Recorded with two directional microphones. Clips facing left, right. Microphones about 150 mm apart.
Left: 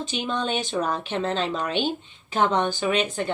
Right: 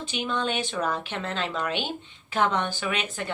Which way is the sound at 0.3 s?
15° left (ahead or behind).